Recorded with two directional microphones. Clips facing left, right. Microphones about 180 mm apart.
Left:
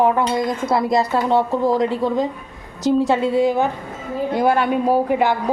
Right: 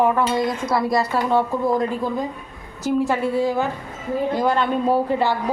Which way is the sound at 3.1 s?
20° left (ahead or behind).